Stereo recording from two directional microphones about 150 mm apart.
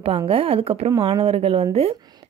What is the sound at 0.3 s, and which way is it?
A woman's voice, 40° right (ahead or behind).